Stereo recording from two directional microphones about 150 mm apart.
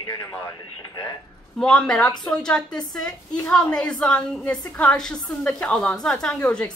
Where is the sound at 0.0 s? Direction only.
25° left (ahead or behind).